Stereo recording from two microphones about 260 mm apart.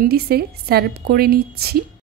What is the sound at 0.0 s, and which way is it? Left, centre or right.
A woman's voice, right.